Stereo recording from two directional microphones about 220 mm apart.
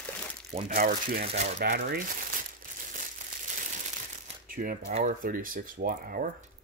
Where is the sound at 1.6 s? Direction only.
45° right (ahead or behind).